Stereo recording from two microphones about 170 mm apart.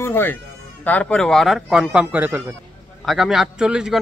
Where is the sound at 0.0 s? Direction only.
10° left (ahead or behind).